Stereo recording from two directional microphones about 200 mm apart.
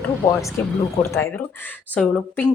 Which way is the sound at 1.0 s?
10° left (ahead or behind).